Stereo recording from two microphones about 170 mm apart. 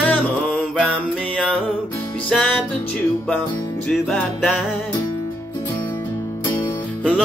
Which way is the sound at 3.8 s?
5° left (ahead or behind).